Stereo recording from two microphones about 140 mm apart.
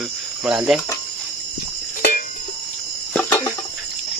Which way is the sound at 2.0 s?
80° left.